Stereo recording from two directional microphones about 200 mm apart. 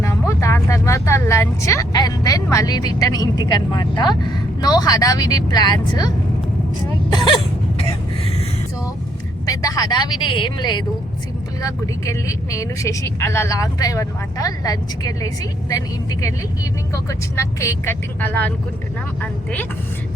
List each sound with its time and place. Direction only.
0.0 s speech: 15° left (ahead or behind)
9.5 s speech: 15° left (ahead or behind)
16.9 s speech: 15° left (ahead or behind)